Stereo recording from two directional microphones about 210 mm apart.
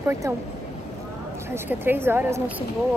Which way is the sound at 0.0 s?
10° right (ahead or behind).